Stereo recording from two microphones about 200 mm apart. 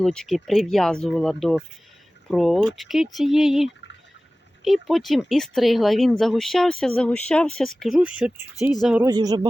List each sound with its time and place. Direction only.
0.0 s speech: 5° left (ahead or behind)
9.0 s speech: 20° right (ahead or behind)